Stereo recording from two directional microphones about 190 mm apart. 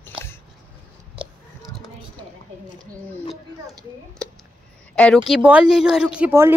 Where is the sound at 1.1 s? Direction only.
5° right (ahead or behind).